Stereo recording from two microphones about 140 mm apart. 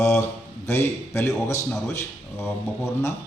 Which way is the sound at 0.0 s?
20° left (ahead or behind).